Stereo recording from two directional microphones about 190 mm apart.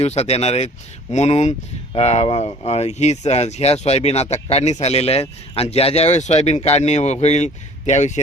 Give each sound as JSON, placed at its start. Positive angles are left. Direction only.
{"t": 0.0, "sound": "speech", "side_deg": 35}